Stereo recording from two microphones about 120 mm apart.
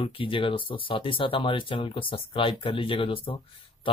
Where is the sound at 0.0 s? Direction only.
45° left (ahead or behind).